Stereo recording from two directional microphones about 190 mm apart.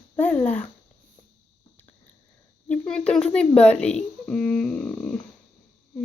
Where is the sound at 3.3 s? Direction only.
5° left (ahead or behind).